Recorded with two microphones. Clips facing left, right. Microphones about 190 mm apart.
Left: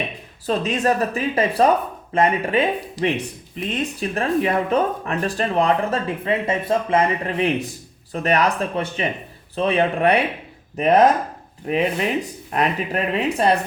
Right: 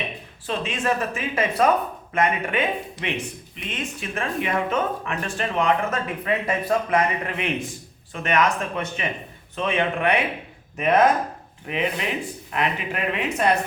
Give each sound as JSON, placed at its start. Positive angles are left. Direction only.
{"t": 0.4, "sound": "speech", "side_deg": 40}
{"t": 3.7, "sound": "speech", "side_deg": 35}